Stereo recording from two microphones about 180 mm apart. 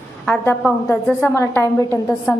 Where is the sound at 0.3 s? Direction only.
10° left (ahead or behind).